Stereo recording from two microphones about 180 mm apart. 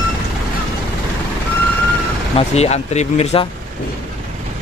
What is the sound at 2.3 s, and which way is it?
Speech, 35° left (ahead or behind).